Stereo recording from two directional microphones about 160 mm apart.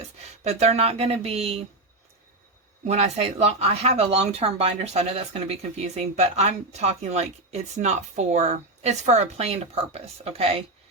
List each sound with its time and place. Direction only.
0.4 s speech: 40° right (ahead or behind)
2.8 s speech: 40° right (ahead or behind)